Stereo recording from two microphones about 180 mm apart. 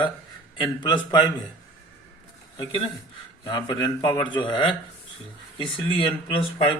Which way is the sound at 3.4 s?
20° left (ahead or behind).